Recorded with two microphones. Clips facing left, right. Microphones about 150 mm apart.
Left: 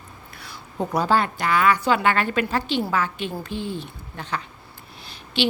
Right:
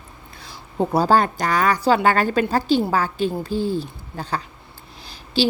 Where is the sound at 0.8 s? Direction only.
35° right (ahead or behind).